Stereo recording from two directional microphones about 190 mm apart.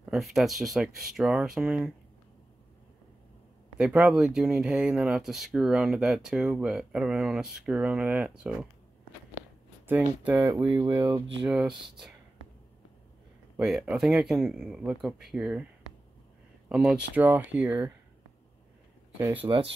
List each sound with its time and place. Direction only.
0.0 s speech: centre (ahead or behind)
3.7 s speech: 5° right (ahead or behind)
9.8 s speech: 10° right (ahead or behind)
11.4 s speech: 5° right (ahead or behind)
13.6 s speech: 5° right (ahead or behind)
16.6 s speech: 5° right (ahead or behind)
19.1 s speech: 15° right (ahead or behind)
19.4 s speech: 30° right (ahead or behind)